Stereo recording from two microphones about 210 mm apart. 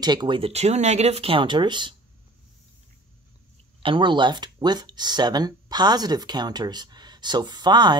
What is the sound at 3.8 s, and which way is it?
Speech, 25° right (ahead or behind).